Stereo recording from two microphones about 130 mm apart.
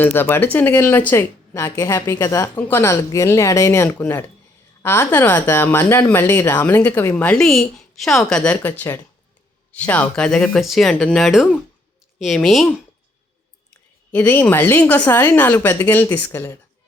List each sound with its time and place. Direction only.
0.0 s speech: 15° left (ahead or behind)
14.1 s speech: 15° left (ahead or behind)